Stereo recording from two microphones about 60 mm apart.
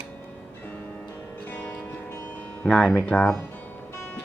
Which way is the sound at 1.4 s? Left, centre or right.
Left.